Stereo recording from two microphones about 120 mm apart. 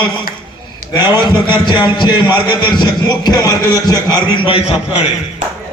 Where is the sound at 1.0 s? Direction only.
35° left (ahead or behind); by 5.0 s 55° left (ahead or behind).